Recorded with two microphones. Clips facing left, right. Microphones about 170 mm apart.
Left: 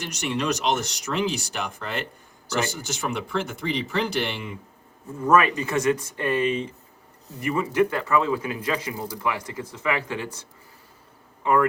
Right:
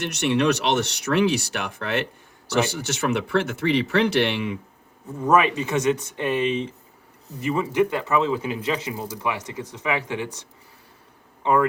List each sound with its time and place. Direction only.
0.0 s speech: 65° right (ahead or behind)
5.2 s speech: 20° right (ahead or behind)